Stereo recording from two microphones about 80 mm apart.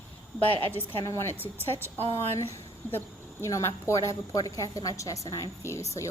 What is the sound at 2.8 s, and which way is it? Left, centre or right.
Speech, left.